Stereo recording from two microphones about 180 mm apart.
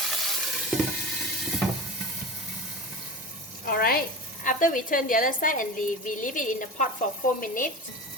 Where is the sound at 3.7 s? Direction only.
55° left (ahead or behind).